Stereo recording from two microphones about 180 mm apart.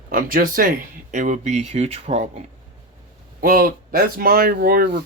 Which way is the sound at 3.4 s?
55° right (ahead or behind).